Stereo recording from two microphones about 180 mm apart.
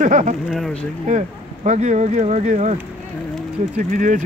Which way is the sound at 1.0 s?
40° right (ahead or behind).